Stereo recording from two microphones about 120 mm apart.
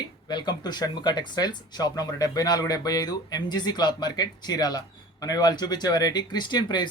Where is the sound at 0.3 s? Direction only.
35° left (ahead or behind).